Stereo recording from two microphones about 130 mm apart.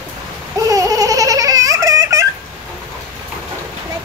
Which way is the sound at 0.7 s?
25° right (ahead or behind).